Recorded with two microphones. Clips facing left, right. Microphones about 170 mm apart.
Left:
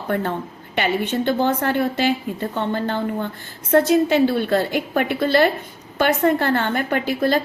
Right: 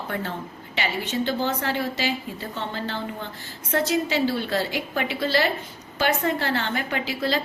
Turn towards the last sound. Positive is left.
turn(degrees=50)  # may be behind; listen again after turning